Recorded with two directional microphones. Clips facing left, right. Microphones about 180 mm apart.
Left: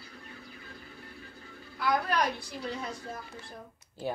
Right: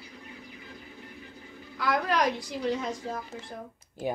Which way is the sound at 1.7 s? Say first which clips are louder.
Right 1 dB; 90° right.